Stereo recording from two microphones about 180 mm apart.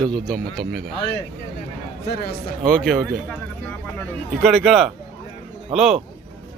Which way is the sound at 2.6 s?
5° left (ahead or behind).